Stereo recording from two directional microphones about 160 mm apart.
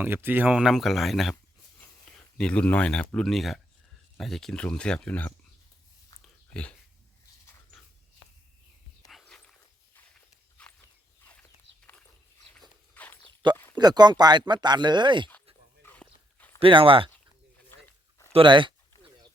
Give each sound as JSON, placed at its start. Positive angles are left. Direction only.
{"t": 0.0, "sound": "speech", "side_deg": -10}
{"t": 2.4, "sound": "speech", "side_deg": 5}
{"t": 6.2, "sound": "a sound", "side_deg": 5}
{"t": 9.0, "sound": "walk", "side_deg": 0}
{"t": 12.9, "sound": "walk", "side_deg": 10}
{"t": 13.7, "sound": "speech", "side_deg": -25}
{"t": 15.9, "sound": "walk", "side_deg": 10}
{"t": 16.6, "sound": "speech", "side_deg": -35}
{"t": 18.3, "sound": "speech", "side_deg": -35}